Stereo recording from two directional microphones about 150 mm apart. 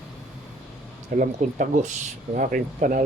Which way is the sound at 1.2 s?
60° right (ahead or behind).